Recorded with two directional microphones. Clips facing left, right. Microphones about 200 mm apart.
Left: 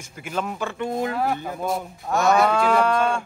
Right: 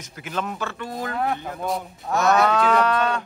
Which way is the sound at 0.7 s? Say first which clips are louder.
Left 5 dB; 25° left (ahead or behind).